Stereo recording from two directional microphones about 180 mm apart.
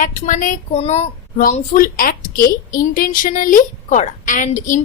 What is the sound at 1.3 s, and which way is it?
A woman's voice, 45° left (ahead or behind).